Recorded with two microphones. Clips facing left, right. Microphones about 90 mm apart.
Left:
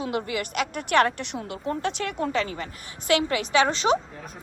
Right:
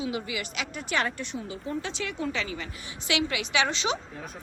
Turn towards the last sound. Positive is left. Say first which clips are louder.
# left 6 dB
turn(degrees=45)  # may be behind; listen again after turning